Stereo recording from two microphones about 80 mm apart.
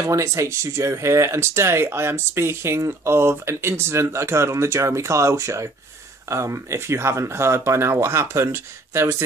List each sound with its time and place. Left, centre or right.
0.0 s speech: right